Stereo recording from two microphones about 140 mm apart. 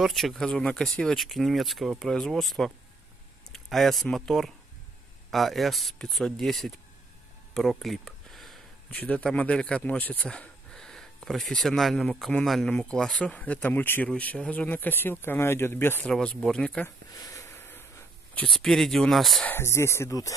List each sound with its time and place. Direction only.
0.0 s speech: centre (ahead or behind)
17.1 s a sound: 25° left (ahead or behind); by 19.5 s centre (ahead or behind)
19.5 s speech: 20° left (ahead or behind)